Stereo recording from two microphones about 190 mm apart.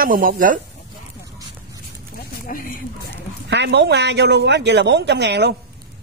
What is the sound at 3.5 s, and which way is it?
Speech, 65° right (ahead or behind).